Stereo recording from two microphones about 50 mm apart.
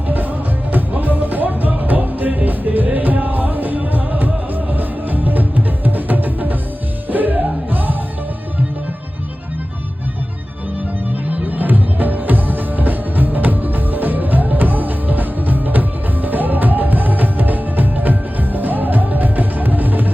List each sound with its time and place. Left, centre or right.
0.1 s music: right
11.3 s music: right